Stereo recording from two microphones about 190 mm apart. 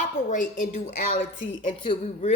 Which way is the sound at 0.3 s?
45° left (ahead or behind).